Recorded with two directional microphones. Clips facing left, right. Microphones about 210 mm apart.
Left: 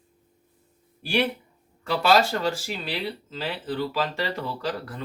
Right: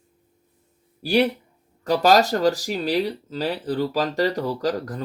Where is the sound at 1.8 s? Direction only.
40° right (ahead or behind).